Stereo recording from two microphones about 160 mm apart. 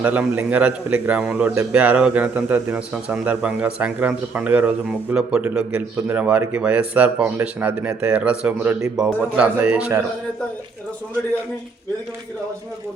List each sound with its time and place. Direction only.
0.0 s a man's voice: 10° right (ahead or behind)